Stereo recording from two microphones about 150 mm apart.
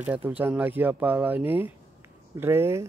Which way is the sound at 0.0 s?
10° right (ahead or behind).